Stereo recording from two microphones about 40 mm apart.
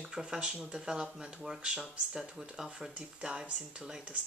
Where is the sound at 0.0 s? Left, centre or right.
Centre.